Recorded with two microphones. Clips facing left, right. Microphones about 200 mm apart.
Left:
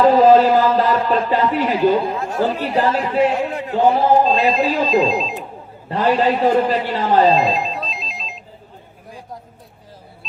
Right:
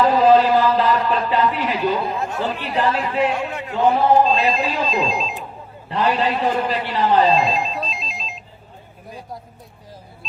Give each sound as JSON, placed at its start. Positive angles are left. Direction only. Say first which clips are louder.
{"t": 0.0, "sound": "a man's voice", "louder": "left 3 dB", "side_deg": 40}
{"t": 4.9, "sound": "speech", "louder": "left 5 dB", "side_deg": 0}
{"t": 5.9, "sound": "a man's voice", "louder": "left 3 dB", "side_deg": 40}
{"t": 7.3, "sound": "telephone", "louder": "left 2 dB", "side_deg": 0}